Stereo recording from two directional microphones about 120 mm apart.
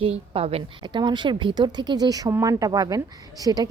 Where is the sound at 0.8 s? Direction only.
40° right (ahead or behind).